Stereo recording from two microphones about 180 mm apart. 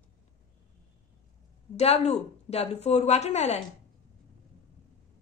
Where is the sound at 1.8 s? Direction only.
35° left (ahead or behind).